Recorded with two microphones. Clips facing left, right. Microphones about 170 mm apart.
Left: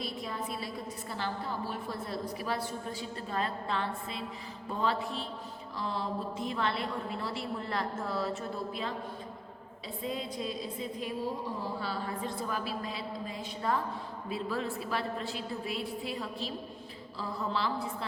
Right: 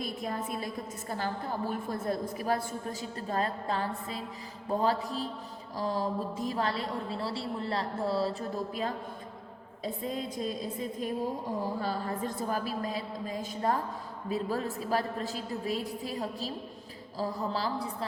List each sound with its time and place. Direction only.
0.0 s a woman's voice: 50° right (ahead or behind)